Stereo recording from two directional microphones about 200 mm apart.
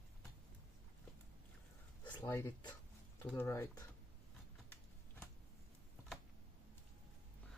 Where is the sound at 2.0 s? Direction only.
20° left (ahead or behind).